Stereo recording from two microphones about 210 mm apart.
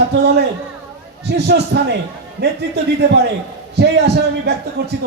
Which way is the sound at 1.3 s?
55° right (ahead or behind).